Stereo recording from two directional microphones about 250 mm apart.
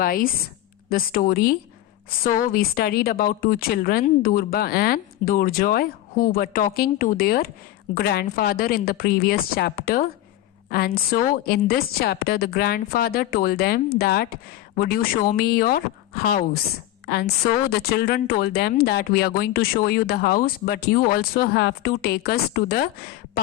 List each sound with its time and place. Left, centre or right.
0.0 s a woman's voice: left